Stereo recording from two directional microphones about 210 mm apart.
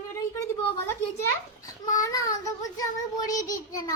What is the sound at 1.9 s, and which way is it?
Child singing, 15° left (ahead or behind).